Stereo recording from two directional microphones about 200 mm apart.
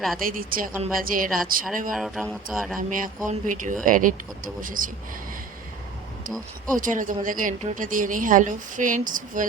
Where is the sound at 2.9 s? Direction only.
40° right (ahead or behind).